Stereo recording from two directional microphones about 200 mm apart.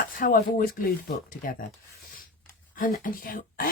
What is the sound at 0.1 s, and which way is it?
Speech, 45° left (ahead or behind).